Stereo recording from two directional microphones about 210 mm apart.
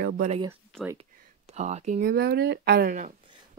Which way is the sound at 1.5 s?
30° right (ahead or behind).